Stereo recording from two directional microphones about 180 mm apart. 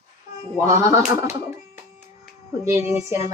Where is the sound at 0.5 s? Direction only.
15° right (ahead or behind).